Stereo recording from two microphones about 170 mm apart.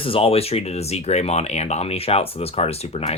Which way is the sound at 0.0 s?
35° left (ahead or behind).